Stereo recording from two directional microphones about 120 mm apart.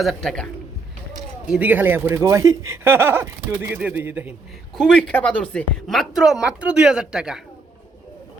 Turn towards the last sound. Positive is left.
turn(degrees=-5)  # may be behind; listen again after turning